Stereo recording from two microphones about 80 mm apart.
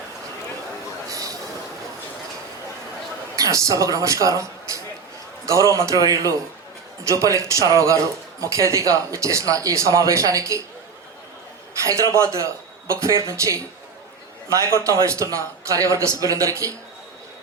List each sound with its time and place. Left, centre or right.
1.1 s a sound: right
3.3 s speech: right
11.8 s a man's voice: right